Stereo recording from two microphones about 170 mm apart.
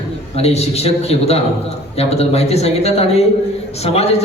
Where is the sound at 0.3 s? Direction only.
40° left (ahead or behind).